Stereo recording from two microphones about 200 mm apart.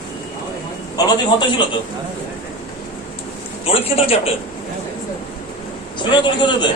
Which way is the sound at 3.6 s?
30° left (ahead or behind).